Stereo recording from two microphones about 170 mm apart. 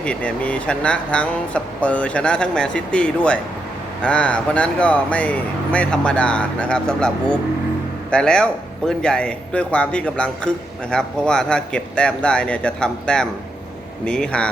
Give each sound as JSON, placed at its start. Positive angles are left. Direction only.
{"t": 0.0, "sound": "a man's voice", "side_deg": 5}